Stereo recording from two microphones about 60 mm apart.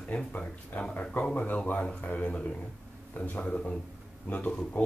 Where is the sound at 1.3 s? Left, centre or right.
Left.